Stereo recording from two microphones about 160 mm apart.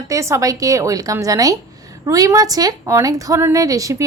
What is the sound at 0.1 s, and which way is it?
A woman's voice, 20° right (ahead or behind).